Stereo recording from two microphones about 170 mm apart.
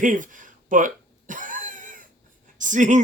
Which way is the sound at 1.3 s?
50° right (ahead or behind).